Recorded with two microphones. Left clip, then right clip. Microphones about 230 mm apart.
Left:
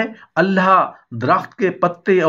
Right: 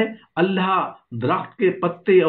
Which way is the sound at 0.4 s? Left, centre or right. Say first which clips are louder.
Left 6 dB; left.